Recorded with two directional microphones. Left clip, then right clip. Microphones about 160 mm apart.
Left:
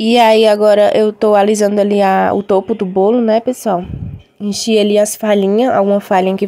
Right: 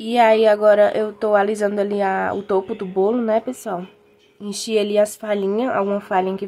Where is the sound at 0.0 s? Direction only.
45° left (ahead or behind).